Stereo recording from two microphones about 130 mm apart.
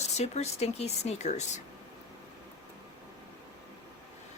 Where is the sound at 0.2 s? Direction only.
55° left (ahead or behind).